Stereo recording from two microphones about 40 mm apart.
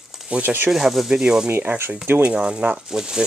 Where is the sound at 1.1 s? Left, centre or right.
Centre.